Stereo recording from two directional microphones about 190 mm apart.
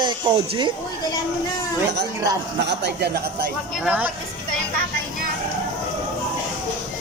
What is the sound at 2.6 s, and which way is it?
Speech, 60° right (ahead or behind).